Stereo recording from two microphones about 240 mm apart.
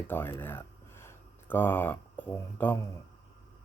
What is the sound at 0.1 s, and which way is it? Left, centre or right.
Speech, centre.